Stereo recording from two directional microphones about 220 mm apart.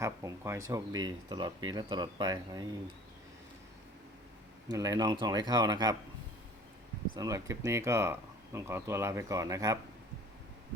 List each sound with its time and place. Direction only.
0.0 s speech: 15° right (ahead or behind)
4.7 s speech: 15° right (ahead or behind)
7.2 s speech: 15° right (ahead or behind)